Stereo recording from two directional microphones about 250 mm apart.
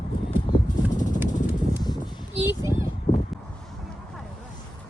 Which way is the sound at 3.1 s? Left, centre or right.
Left.